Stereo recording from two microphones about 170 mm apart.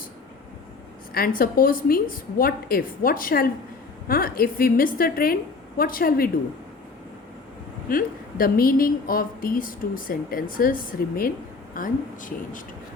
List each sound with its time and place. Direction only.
1.1 s a woman's voice: 60° left (ahead or behind)
7.9 s a woman's voice: 55° left (ahead or behind)